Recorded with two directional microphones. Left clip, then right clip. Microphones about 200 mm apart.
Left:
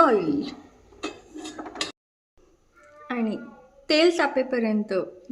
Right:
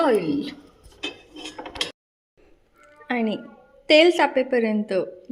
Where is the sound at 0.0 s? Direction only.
10° right (ahead or behind).